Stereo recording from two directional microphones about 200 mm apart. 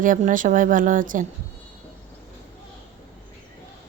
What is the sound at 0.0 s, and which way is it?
A woman's voice, 40° right (ahead or behind).